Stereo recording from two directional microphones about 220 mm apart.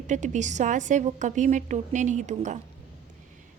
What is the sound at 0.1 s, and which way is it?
A woman's voice, 35° right (ahead or behind).